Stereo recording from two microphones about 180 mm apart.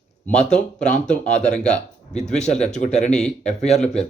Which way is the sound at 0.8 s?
40° left (ahead or behind).